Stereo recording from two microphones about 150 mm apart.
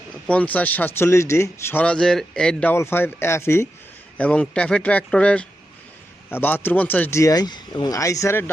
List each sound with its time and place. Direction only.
0.3 s speech: 10° left (ahead or behind)
1.8 s speech: 5° left (ahead or behind)